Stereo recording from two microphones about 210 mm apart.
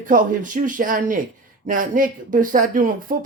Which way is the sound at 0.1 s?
40° right (ahead or behind).